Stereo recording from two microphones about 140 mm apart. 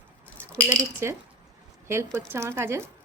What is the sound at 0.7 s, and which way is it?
Speech, 20° right (ahead or behind).